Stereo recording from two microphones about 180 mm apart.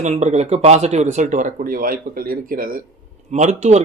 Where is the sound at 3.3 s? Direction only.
40° right (ahead or behind).